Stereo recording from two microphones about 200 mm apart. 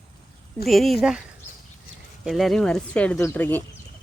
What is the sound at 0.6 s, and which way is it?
Speech, centre (ahead or behind).